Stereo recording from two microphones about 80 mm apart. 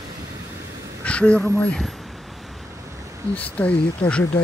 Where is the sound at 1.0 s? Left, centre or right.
Centre.